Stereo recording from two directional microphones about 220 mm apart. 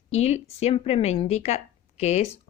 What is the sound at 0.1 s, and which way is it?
A woman's voice, 30° left (ahead or behind).